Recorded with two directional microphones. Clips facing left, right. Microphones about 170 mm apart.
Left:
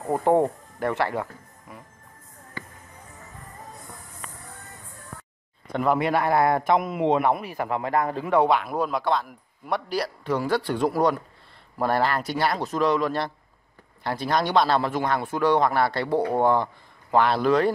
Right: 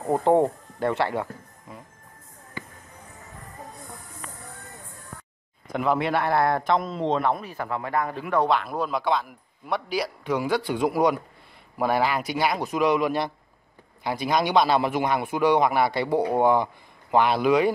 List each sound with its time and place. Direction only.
0.0 s speech: 20° right (ahead or behind)
0.7 s music: 20° right (ahead or behind)
5.7 s a man's voice: centre (ahead or behind); by 7.9 s 20° left (ahead or behind)
7.9 s a man's voice: 40° left (ahead or behind)
8.4 s a man's voice: 5° left (ahead or behind); by 17.6 s 15° right (ahead or behind)